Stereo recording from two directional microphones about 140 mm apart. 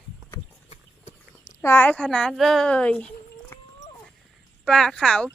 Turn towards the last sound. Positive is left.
turn(degrees=5)  # may be behind; listen again after turning